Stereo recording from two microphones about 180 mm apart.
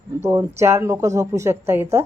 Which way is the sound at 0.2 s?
15° right (ahead or behind).